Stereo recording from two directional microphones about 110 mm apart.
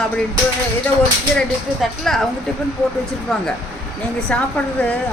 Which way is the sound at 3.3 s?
Centre (ahead or behind).